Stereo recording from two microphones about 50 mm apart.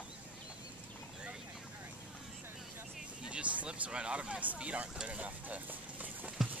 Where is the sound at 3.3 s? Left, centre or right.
Right.